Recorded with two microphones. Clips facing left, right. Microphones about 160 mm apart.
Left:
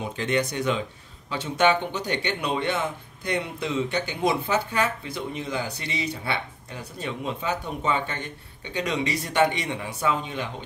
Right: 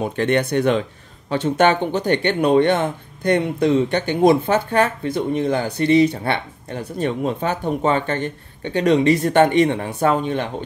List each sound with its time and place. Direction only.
0.0 s speech: 55° right (ahead or behind)